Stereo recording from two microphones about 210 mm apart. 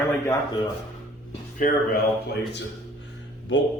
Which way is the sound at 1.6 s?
40° left (ahead or behind).